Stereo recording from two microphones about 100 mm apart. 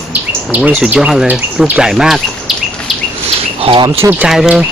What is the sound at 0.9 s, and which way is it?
Speech, 5° right (ahead or behind).